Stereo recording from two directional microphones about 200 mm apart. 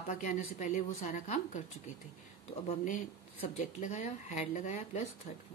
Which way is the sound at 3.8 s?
35° left (ahead or behind).